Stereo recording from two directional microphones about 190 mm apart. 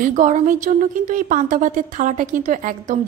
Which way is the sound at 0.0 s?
40° right (ahead or behind).